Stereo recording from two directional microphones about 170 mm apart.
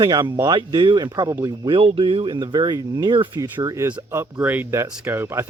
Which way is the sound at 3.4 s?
15° right (ahead or behind).